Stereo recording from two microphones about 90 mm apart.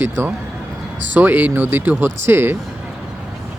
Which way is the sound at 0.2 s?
25° right (ahead or behind).